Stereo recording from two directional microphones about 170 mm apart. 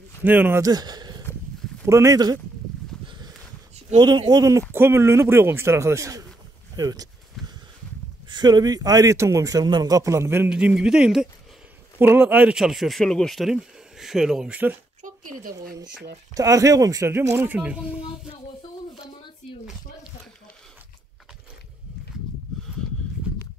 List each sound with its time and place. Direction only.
0.2 s speech: 10° right (ahead or behind)
0.7 s speech: 25° right (ahead or behind)
3.1 s a sound: 25° right (ahead or behind)
3.9 s speech: 25° right (ahead or behind)
6.7 s a sound: 20° right (ahead or behind)
8.3 s speech: 25° right (ahead or behind); by 14.8 s 10° right (ahead or behind)
15.0 s speech: 50° right (ahead or behind)
16.3 s speech: 20° right (ahead or behind)